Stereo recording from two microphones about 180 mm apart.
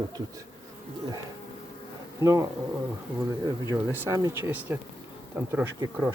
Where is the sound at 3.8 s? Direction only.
15° right (ahead or behind).